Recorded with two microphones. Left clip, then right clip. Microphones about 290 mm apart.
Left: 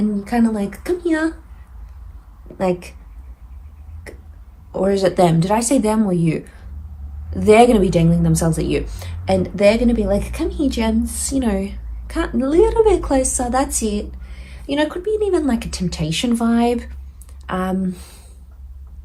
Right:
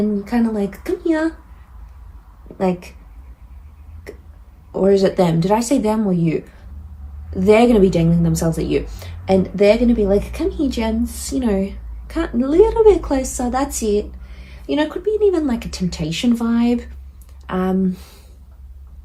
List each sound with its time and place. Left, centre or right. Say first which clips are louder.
0.2 s speech: even; left
2.6 s speech: left 1 dB; left
4.7 s speech: right 2 dB; left